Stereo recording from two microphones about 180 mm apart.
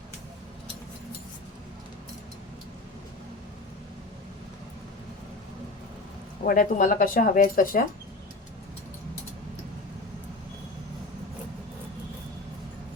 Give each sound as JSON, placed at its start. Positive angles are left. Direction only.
{"t": 6.4, "sound": "speech", "side_deg": 50}